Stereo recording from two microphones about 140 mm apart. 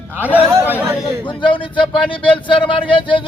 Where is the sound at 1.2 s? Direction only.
35° left (ahead or behind).